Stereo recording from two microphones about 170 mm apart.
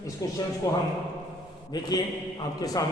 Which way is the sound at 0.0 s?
20° left (ahead or behind).